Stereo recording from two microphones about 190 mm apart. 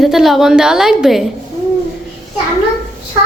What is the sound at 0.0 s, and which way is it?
A woman's voice, centre (ahead or behind).